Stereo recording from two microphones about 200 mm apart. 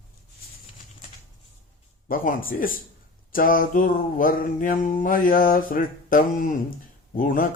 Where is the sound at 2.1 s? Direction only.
45° left (ahead or behind).